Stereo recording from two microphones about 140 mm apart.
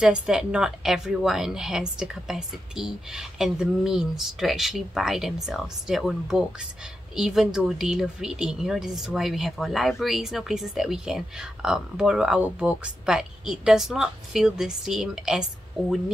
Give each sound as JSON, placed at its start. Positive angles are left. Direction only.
{"t": 0.0, "sound": "speech", "side_deg": -5}